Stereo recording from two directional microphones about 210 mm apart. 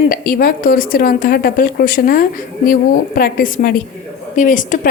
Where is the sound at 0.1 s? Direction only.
45° left (ahead or behind).